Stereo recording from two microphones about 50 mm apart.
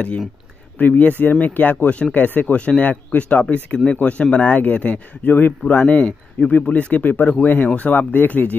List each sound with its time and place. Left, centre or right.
0.7 s speech: left
2.5 s speech: left
4.5 s speech: left